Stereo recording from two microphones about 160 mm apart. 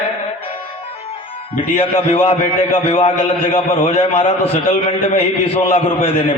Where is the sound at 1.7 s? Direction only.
40° left (ahead or behind).